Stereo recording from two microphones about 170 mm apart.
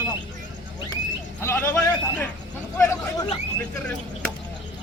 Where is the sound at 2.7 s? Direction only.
15° left (ahead or behind).